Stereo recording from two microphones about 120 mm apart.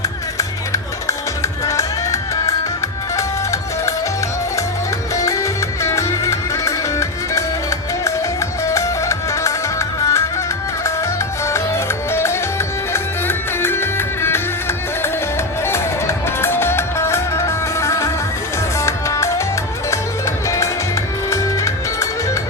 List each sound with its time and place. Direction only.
1.4 s music: 25° left (ahead or behind)
5.2 s music: 25° left (ahead or behind)
8.6 s music: 25° left (ahead or behind)
11.4 s music: 25° left (ahead or behind)